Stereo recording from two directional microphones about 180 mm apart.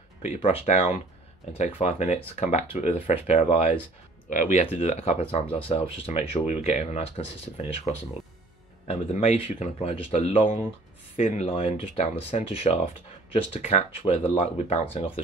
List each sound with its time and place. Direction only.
0.2 s speech: 40° left (ahead or behind)